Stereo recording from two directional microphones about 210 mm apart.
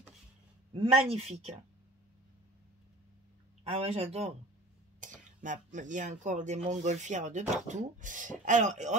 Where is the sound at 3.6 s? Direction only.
30° right (ahead or behind).